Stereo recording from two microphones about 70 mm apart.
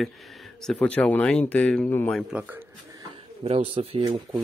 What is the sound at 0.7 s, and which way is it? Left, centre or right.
Speech, left.